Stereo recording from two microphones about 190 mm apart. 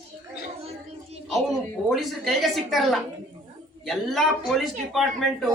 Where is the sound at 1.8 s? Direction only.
Centre (ahead or behind).